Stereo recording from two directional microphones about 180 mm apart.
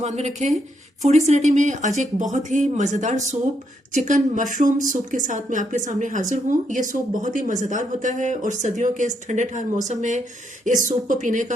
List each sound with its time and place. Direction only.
0.0 s speech: 40° right (ahead or behind)